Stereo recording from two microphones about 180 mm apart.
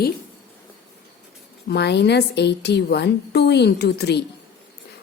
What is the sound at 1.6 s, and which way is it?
A woman's voice, 70° left (ahead or behind).